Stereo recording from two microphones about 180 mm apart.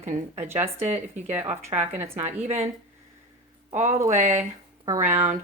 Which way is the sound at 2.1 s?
35° right (ahead or behind).